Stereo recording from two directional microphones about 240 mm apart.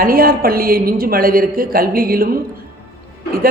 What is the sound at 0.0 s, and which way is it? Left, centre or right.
Speech, right.